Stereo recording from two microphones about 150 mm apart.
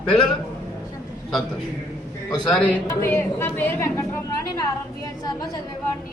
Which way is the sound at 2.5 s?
10° left (ahead or behind).